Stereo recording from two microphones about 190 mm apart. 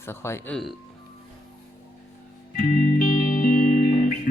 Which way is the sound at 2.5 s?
50° left (ahead or behind).